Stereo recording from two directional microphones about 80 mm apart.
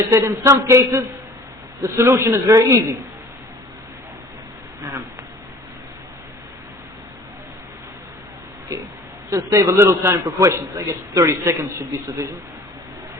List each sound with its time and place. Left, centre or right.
0.1 s a man's voice: right
9.3 s a man's voice: right